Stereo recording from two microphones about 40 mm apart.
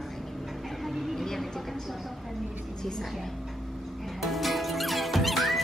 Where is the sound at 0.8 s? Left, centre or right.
Centre.